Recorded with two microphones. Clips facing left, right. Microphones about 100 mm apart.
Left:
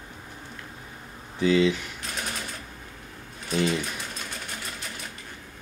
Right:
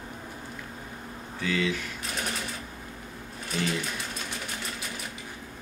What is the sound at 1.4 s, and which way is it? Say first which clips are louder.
Speech: left 7 dB; 20° left (ahead or behind).